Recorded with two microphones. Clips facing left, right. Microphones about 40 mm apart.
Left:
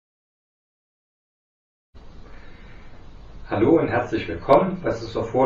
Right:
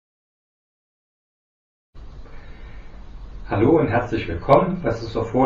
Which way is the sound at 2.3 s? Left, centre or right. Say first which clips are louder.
Right 2 dB; right.